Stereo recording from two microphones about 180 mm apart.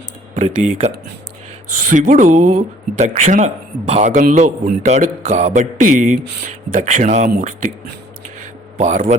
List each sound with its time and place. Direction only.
0.3 s speech: 35° right (ahead or behind)
8.8 s speech: 40° right (ahead or behind)